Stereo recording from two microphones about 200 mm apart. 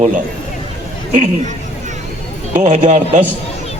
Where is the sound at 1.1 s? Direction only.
35° right (ahead or behind).